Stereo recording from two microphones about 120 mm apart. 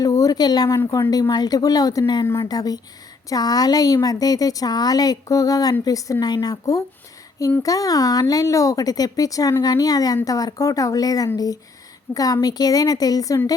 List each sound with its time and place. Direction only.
0.0 s a woman's voice: 30° left (ahead or behind)
2.2 s speech: 20° left (ahead or behind)
2.5 s a woman's voice: 30° left (ahead or behind)